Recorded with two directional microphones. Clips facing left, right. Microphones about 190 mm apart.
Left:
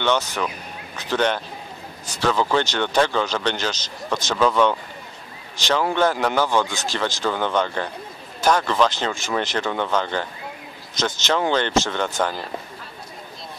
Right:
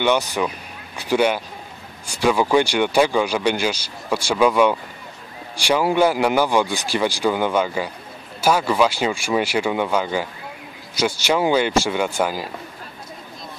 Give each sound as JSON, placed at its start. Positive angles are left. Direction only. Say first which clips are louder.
{"t": 0.0, "sound": "speech", "louder": "right 3 dB", "side_deg": -10}